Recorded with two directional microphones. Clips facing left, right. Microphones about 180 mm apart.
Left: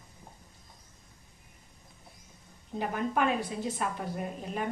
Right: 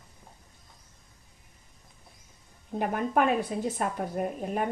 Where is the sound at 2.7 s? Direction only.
50° right (ahead or behind).